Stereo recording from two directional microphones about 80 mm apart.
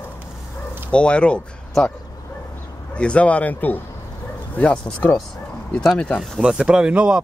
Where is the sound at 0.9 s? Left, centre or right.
Centre.